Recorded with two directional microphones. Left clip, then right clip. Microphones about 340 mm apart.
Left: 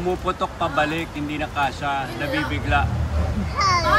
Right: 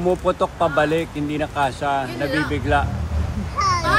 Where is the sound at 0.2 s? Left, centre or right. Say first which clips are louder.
Right 4 dB; centre.